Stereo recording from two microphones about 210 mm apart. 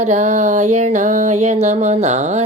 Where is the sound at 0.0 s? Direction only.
35° right (ahead or behind).